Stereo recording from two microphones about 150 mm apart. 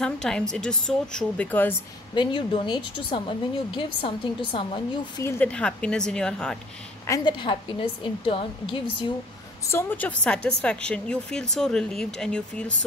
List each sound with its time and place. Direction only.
0.0 s a woman's voice: 5° left (ahead or behind)
2.1 s speech: 30° left (ahead or behind)
5.2 s speech: 10° left (ahead or behind)
7.1 s speech: 30° left (ahead or behind)
9.7 s a woman's voice: 15° left (ahead or behind)